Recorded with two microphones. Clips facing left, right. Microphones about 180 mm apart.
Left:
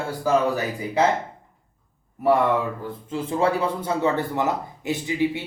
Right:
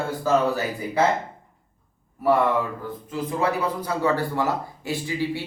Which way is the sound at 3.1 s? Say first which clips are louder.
Left 2 dB; 30° left (ahead or behind).